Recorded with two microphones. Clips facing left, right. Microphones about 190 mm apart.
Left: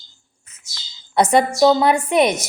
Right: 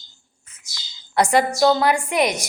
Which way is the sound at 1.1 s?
20° left (ahead or behind).